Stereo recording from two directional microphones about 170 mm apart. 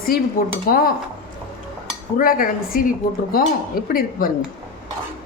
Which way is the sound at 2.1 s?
55° left (ahead or behind).